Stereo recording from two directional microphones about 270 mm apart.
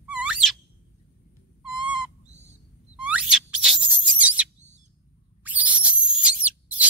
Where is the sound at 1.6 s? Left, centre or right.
Centre.